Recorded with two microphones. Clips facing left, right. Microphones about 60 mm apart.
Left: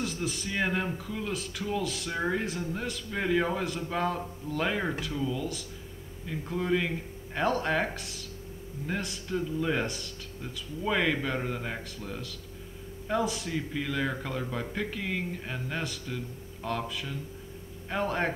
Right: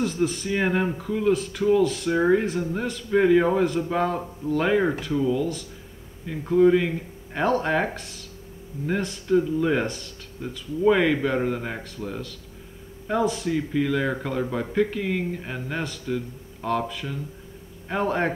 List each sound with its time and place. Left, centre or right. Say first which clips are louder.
0.0 s speech: right 9 dB; centre
0.5 s speech: right 3 dB; centre
1.3 s a man's voice: right 13 dB; centre
2.0 s speech: right 10 dB; centre
13.2 s a man's voice: right 6 dB; centre
13.5 s speech: right 9 dB; centre